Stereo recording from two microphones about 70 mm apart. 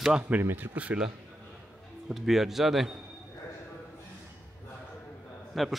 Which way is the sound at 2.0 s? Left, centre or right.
Centre.